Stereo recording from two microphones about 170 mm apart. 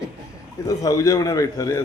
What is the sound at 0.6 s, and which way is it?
A man's voice, 20° left (ahead or behind).